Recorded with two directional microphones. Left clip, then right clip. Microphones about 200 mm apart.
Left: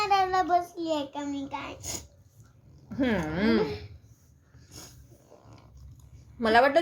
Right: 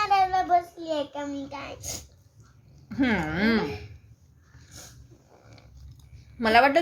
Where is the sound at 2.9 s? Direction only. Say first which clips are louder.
Right 2 dB; 20° right (ahead or behind).